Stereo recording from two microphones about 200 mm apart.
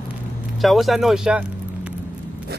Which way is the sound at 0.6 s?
Centre (ahead or behind).